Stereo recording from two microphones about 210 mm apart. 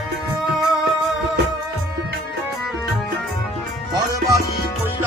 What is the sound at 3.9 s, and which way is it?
Music, 15° right (ahead or behind).